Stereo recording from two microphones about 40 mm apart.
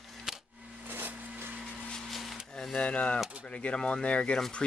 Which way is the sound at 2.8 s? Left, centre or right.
Left.